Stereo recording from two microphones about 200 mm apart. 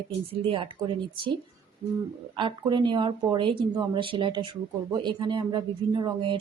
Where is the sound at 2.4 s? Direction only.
25° right (ahead or behind).